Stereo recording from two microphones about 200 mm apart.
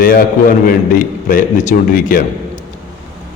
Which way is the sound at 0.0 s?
45° left (ahead or behind).